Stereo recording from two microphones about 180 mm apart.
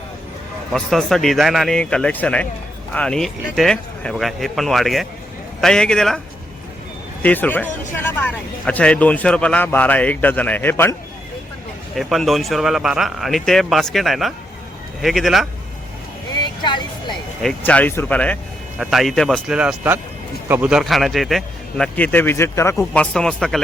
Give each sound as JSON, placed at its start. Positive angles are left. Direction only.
{"t": 0.7, "sound": "speech", "side_deg": 0}
{"t": 7.2, "sound": "speech", "side_deg": 10}
{"t": 11.9, "sound": "speech", "side_deg": 0}
{"t": 16.6, "sound": "speech", "side_deg": 25}
{"t": 17.4, "sound": "speech", "side_deg": 5}